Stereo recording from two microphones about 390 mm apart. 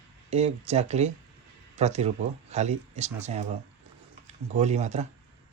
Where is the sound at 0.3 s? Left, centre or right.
Centre.